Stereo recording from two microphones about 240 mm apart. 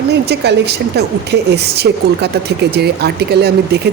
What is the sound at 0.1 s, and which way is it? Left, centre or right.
A woman's voice, right.